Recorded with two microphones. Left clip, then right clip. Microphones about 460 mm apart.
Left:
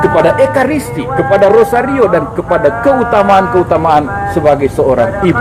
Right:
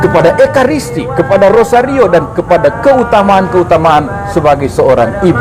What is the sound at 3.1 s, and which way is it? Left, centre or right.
A man's voice, right.